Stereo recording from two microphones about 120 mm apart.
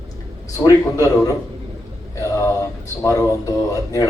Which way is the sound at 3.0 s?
25° left (ahead or behind).